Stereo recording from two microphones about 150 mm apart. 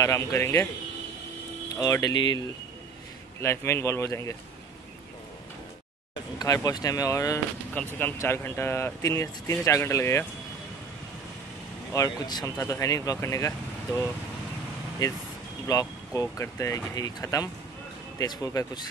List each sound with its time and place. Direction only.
0.0 s speech: 20° left (ahead or behind)
1.8 s speech: 25° left (ahead or behind)
3.3 s speech: 15° left (ahead or behind)
6.3 s speech: 25° left (ahead or behind)
11.9 s speech: 25° left (ahead or behind)
15.6 s speech: 25° left (ahead or behind)